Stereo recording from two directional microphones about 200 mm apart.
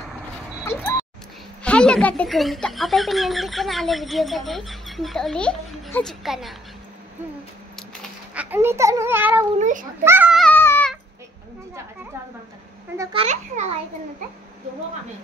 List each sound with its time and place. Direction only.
0.7 s a sound: 10° left (ahead or behind)
1.6 s speech: 5° left (ahead or behind)
8.4 s a child's voice: 10° right (ahead or behind)
9.6 s a child's voice: 40° right (ahead or behind)
10.0 s a child's voice: 10° right (ahead or behind)
10.4 s a sound: 10° left (ahead or behind)
13.1 s a child's voice: 30° right (ahead or behind)